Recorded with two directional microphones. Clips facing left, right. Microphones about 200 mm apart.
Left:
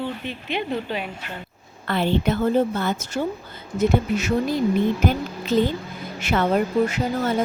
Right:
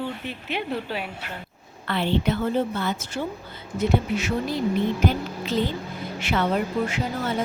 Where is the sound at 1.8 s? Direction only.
45° left (ahead or behind).